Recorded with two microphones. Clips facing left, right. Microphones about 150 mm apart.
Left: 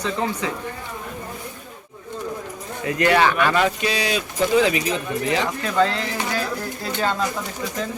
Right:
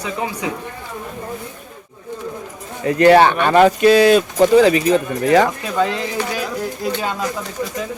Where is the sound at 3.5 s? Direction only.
50° right (ahead or behind).